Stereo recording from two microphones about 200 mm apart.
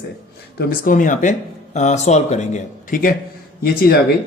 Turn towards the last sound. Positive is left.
turn(degrees=50)  # may be behind; listen again after turning